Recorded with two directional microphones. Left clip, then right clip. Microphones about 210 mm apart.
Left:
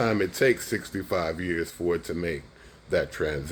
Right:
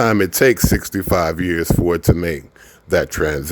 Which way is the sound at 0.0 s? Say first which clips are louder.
Right 9 dB; 60° right (ahead or behind).